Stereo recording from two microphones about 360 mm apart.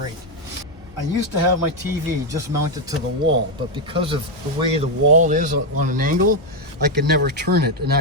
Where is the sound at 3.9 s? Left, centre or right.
Centre.